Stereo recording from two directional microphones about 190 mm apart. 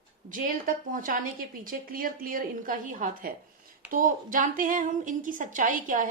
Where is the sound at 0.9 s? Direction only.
45° right (ahead or behind).